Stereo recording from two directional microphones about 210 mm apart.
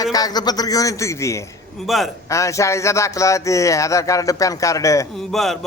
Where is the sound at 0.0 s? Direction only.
15° left (ahead or behind).